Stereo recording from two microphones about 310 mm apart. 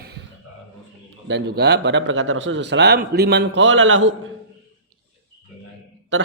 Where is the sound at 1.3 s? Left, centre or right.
Right.